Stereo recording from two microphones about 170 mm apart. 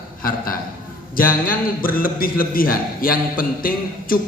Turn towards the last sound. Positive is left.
turn(degrees=55)  # may be behind; listen again after turning